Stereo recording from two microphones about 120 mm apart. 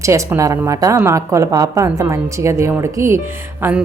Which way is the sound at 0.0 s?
25° right (ahead or behind).